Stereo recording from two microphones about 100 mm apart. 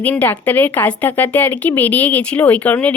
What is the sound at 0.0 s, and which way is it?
A woman's voice, 15° left (ahead or behind).